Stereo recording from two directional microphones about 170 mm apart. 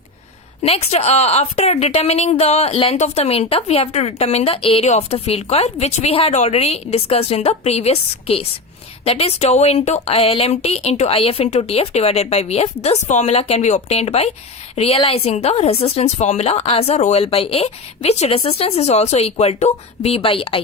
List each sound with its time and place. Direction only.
0.6 s a woman's voice: 40° left (ahead or behind)